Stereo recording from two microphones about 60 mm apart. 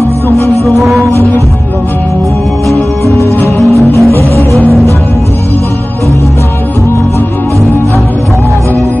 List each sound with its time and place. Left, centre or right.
0.7 s music: centre
2.7 s music: right